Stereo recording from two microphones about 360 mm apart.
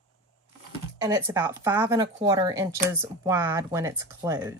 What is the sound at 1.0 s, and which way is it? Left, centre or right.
Speech, centre.